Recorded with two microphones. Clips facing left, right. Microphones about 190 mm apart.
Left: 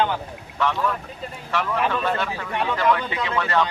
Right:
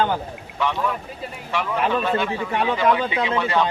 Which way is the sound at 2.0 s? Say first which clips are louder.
Right 3 dB; 5° right (ahead or behind).